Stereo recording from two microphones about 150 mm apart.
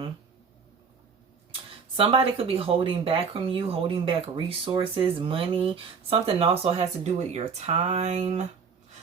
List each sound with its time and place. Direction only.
2.0 s speech: 40° right (ahead or behind)